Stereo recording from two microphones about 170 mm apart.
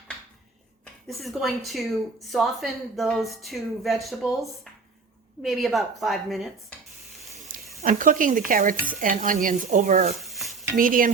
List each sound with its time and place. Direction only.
1.0 s a woman's voice: centre (ahead or behind)
7.3 s a sound: 55° right (ahead or behind)
7.9 s speech: 50° right (ahead or behind)
10.2 s stir: centre (ahead or behind)
10.8 s speech: 55° right (ahead or behind)